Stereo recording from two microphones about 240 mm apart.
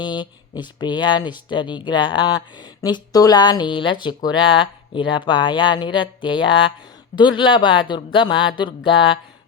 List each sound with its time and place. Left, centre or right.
0.0 s speech: centre